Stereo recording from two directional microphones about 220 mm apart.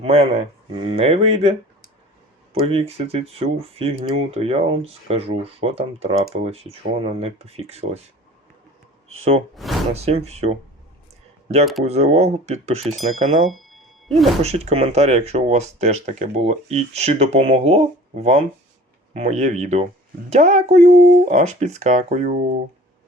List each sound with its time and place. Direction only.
0.0 s speech: 25° right (ahead or behind)
9.9 s speech: 30° right (ahead or behind)
11.8 s speech: 30° right (ahead or behind)
13.5 s a sound: centre (ahead or behind)
14.4 s speech: 30° right (ahead or behind)